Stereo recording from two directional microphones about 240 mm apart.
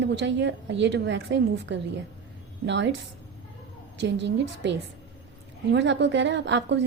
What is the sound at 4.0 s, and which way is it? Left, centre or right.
A woman's voice, right.